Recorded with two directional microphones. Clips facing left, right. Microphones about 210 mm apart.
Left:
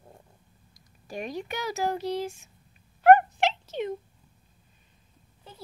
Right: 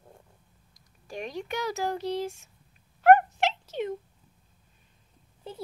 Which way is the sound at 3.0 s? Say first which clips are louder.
Left 1 dB; 5° right (ahead or behind).